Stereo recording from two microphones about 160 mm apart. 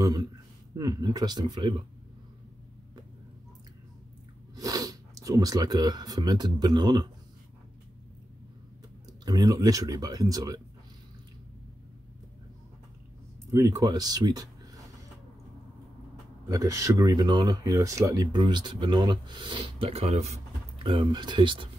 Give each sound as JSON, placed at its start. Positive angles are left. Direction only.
{"t": 0.0, "sound": "a sound", "side_deg": -20}
{"t": 0.7, "sound": "speech", "side_deg": -25}
{"t": 4.6, "sound": "speech", "side_deg": -20}
{"t": 9.2, "sound": "speech", "side_deg": -25}
{"t": 13.5, "sound": "speech", "side_deg": -20}
{"t": 16.4, "sound": "speech", "side_deg": -20}
{"t": 20.8, "sound": "speech", "side_deg": -30}